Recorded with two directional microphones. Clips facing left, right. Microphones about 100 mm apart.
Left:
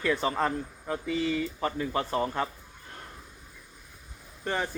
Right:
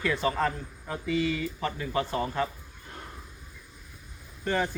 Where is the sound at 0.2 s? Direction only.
25° left (ahead or behind).